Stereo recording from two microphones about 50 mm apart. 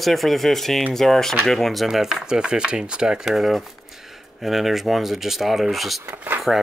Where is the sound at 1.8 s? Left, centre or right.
Centre.